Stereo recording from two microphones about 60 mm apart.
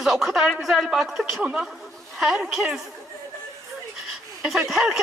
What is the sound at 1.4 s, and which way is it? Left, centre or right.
Speech, centre.